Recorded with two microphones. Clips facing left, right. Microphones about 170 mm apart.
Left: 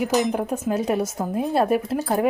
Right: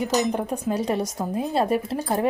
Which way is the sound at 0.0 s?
10° left (ahead or behind).